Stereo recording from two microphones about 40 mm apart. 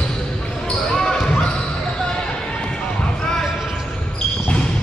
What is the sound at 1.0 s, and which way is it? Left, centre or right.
Basketball bounce, centre.